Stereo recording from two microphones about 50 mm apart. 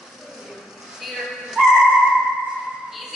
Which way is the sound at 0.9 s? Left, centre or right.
Centre.